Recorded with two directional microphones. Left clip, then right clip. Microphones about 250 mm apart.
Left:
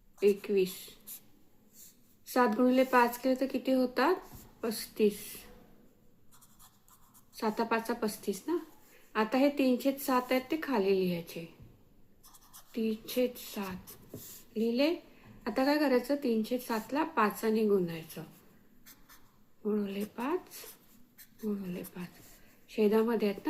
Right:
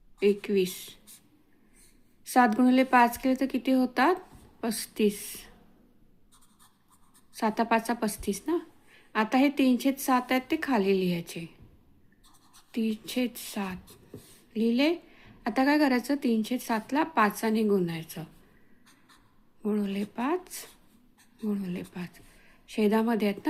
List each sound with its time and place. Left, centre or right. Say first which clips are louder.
0.2 s a woman's voice: right 2 dB; right
2.2 s a woman's voice: right 5 dB; right
7.3 s a woman's voice: right 5 dB; right
12.7 s a woman's voice: right 1 dB; right
19.6 s a woman's voice: right 3 dB; right